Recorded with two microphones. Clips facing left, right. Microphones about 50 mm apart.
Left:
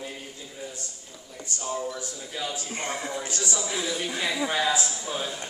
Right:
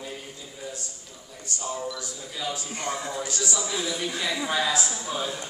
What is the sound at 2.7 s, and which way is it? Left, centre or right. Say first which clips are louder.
Speech: even; left.